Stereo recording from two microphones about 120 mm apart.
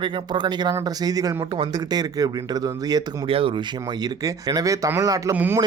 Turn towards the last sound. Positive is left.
turn(degrees=-20)  # may be behind; listen again after turning